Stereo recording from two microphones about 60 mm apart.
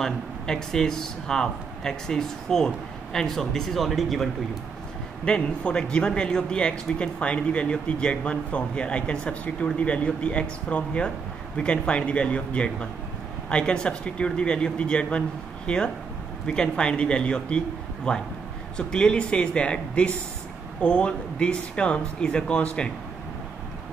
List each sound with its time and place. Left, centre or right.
0.0 s a man's voice: centre
5.2 s a man's voice: centre